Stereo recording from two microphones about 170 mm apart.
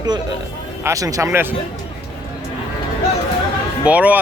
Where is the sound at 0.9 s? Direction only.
20° right (ahead or behind).